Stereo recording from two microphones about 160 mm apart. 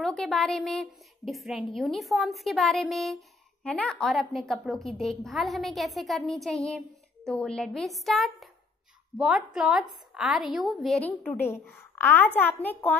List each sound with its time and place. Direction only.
0.0 s a woman's voice: centre (ahead or behind)
11.1 s a woman's voice: 15° left (ahead or behind)